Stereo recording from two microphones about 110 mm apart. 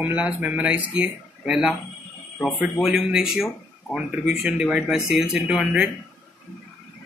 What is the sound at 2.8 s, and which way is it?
Speech, 5° right (ahead or behind).